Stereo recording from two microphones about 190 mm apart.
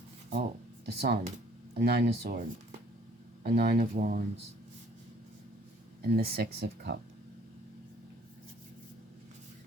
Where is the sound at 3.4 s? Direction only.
55° right (ahead or behind).